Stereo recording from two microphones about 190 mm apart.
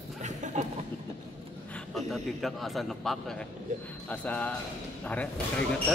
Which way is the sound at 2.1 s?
Centre (ahead or behind).